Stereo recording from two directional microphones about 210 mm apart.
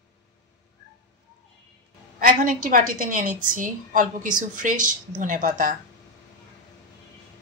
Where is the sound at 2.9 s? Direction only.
40° right (ahead or behind).